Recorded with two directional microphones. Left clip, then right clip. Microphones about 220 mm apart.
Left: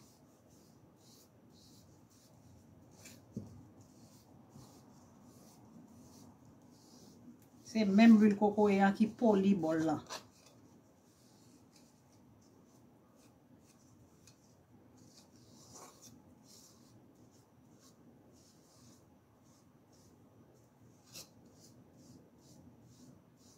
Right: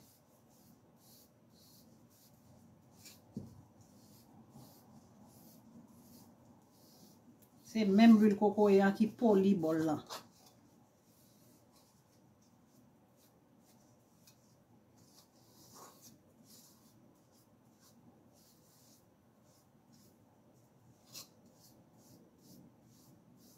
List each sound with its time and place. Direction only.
7.6 s speech: 10° left (ahead or behind)